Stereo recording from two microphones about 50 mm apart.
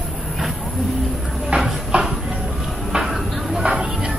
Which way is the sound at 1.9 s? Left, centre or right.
Right.